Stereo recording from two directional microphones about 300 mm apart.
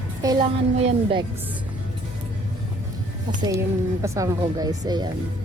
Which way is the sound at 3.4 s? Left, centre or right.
Centre.